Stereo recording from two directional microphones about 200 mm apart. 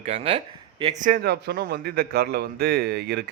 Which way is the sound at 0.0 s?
30° right (ahead or behind).